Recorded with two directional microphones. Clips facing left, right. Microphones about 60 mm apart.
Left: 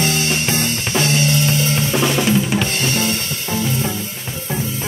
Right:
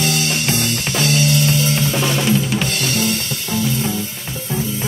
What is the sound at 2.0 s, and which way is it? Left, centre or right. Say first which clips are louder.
Drum kit: left 4 dB; centre.